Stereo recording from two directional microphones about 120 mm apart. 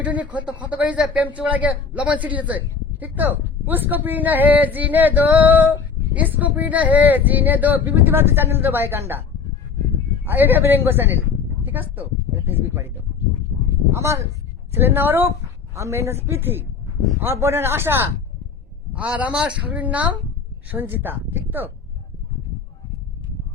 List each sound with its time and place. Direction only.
0.0 s speech: 10° right (ahead or behind)
10.2 s a woman's voice: 15° right (ahead or behind)
13.9 s a woman's voice: 25° right (ahead or behind)